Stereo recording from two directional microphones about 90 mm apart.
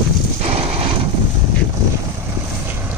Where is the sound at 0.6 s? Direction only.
90° right.